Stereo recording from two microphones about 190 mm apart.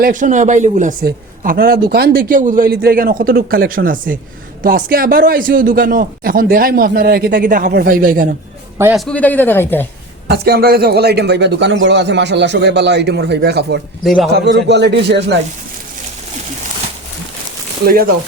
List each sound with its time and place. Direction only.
0.0 s a man's voice: 40° right (ahead or behind)
9.0 s speech: 5° left (ahead or behind)
10.2 s speech: 55° right (ahead or behind)
14.0 s a man's voice: centre (ahead or behind)
14.3 s speech: 65° right (ahead or behind)
17.8 s a man's voice: 50° right (ahead or behind)